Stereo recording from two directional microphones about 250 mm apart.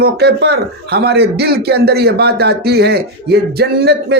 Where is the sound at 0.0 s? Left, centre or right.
Right.